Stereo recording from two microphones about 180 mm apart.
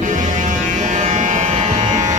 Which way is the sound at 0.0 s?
45° right (ahead or behind).